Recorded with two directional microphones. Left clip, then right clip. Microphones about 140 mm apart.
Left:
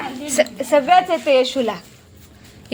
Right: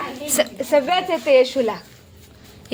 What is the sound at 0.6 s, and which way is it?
A woman's voice, 5° left (ahead or behind).